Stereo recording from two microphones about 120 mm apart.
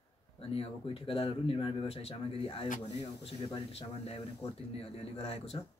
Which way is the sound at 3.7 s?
60° left (ahead or behind).